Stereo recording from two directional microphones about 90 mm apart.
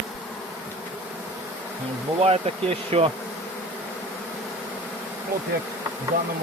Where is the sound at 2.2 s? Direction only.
90° right.